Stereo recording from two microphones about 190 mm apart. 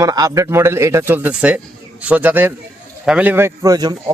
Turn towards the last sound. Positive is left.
turn(degrees=-20)  # may be behind; listen again after turning